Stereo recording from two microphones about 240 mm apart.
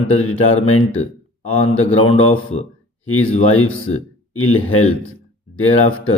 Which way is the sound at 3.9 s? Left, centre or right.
Left.